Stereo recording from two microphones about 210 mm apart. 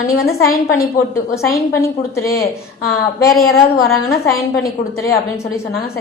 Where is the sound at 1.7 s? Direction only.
15° left (ahead or behind).